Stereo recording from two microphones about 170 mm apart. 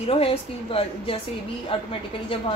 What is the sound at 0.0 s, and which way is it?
A woman's voice, 35° left (ahead or behind).